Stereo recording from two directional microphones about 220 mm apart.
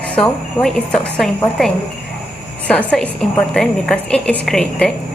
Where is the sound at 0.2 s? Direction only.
Centre (ahead or behind).